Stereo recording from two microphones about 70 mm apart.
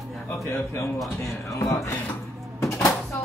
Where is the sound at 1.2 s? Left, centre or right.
Left.